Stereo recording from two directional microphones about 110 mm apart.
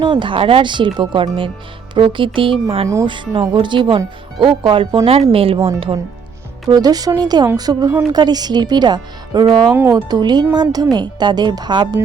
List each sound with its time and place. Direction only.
0.0 s speech: 45° right (ahead or behind)
5.0 s speech: 60° right (ahead or behind)
6.7 s speech: 35° right (ahead or behind)